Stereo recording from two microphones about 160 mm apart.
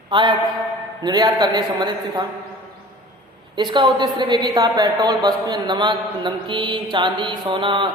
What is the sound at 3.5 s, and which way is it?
A woman's voice, 30° right (ahead or behind).